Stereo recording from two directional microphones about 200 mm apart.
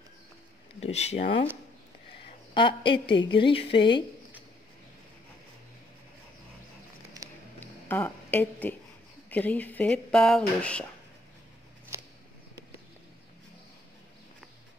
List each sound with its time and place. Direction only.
0.7 s a woman's voice: 30° left (ahead or behind)
7.2 s music: 15° right (ahead or behind)
7.6 s speech: 10° left (ahead or behind)
11.9 s a sound: 15° right (ahead or behind)